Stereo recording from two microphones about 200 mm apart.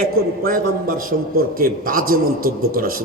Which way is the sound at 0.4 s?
45° right (ahead or behind).